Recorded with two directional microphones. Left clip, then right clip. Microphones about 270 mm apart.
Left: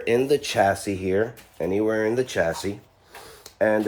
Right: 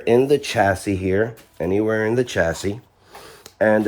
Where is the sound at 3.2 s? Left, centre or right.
Right.